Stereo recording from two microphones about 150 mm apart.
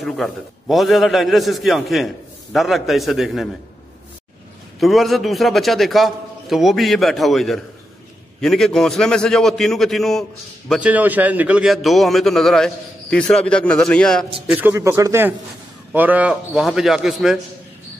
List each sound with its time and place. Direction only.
0.0 s a man's voice: centre (ahead or behind)
4.7 s a man's voice: centre (ahead or behind)
10.7 s a man's voice: 10° right (ahead or behind)
14.5 s a man's voice: 15° right (ahead or behind)